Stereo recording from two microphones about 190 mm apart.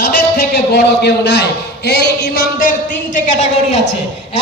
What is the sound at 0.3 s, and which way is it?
A man's voice, 55° left (ahead or behind).